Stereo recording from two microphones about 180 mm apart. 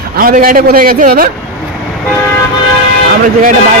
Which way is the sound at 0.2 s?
50° right (ahead or behind).